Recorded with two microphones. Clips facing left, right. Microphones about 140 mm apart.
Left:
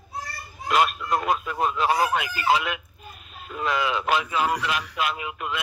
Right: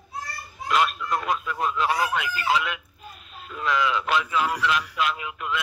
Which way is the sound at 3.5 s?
45° left (ahead or behind).